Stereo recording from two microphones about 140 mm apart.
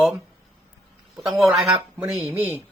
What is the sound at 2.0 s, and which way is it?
Speech, centre (ahead or behind).